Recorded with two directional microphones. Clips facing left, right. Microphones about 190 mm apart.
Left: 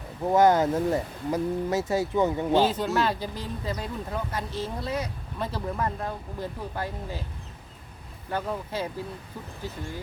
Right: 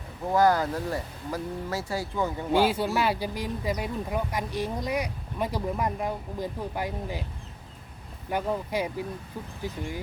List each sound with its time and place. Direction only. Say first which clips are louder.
0.3 s speech: left 3 dB; 20° left (ahead or behind)
2.5 s speech: left 1 dB; 10° right (ahead or behind)
8.3 s speech: right 2 dB; 15° right (ahead or behind)